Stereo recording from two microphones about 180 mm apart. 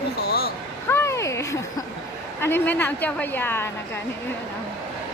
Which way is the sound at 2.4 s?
10° left (ahead or behind).